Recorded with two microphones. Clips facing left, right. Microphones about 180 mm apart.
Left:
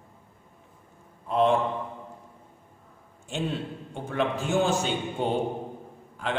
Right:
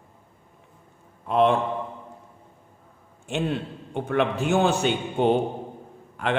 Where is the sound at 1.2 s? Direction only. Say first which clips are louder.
Right 3 dB; 70° right (ahead or behind).